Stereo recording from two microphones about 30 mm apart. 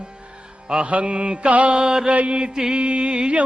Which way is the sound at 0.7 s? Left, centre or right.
Right.